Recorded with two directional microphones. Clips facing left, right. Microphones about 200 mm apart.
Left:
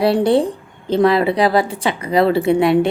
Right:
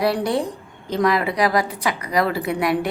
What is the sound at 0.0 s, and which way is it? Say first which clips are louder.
A woman's voice: left 6 dB; 30° left (ahead or behind).